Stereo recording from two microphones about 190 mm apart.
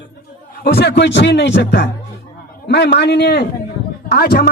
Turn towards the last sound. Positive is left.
turn(degrees=55)  # may be behind; listen again after turning